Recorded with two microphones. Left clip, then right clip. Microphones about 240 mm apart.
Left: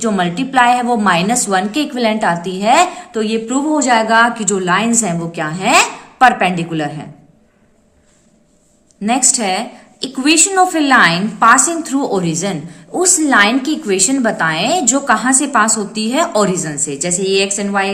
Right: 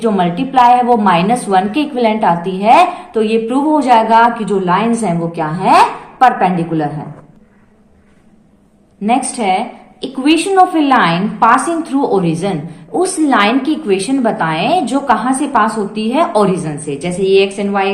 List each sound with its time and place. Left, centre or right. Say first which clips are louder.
0.0 s a woman's voice: right 3 dB; left
9.0 s a woman's voice: right 2 dB; left